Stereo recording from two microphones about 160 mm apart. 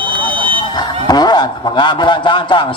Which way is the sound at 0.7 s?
25° left (ahead or behind).